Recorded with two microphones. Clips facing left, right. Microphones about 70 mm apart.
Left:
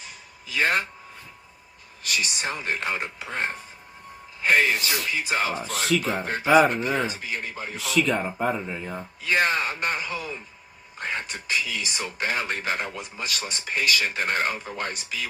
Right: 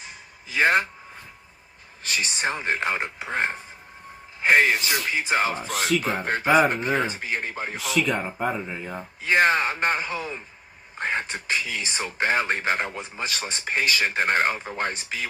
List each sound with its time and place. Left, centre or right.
0.0 s a sound: right
2.0 s speech: right
5.6 s speech: centre
6.0 s speech: right
7.8 s speech: centre
9.2 s speech: right